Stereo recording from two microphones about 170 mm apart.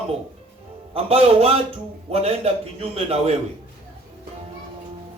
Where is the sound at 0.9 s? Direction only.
35° right (ahead or behind).